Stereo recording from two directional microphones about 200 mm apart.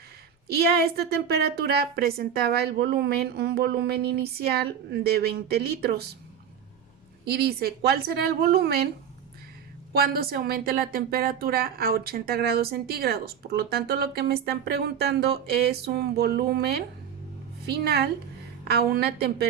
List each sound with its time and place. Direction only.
0.4 s a woman's voice: 50° right (ahead or behind)
7.3 s a woman's voice: 50° right (ahead or behind)
9.9 s a woman's voice: 50° right (ahead or behind)